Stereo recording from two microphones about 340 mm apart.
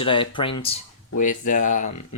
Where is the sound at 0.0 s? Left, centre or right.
Centre.